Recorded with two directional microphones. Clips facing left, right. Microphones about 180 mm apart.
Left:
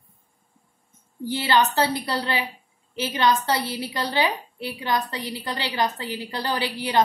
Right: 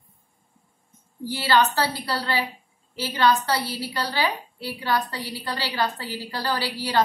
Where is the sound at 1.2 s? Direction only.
20° left (ahead or behind).